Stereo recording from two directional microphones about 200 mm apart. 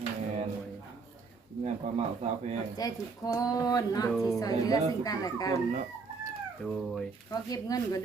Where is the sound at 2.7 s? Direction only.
15° left (ahead or behind).